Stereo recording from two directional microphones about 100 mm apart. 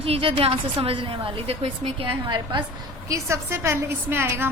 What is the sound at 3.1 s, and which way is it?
A woman's voice, 30° right (ahead or behind).